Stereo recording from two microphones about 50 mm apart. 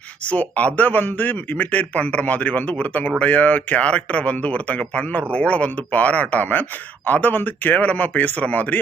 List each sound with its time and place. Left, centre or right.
0.3 s speech: left